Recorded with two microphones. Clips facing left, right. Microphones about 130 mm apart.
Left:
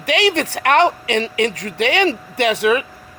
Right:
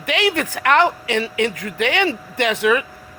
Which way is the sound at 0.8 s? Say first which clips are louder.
Left 2 dB; 25° left (ahead or behind).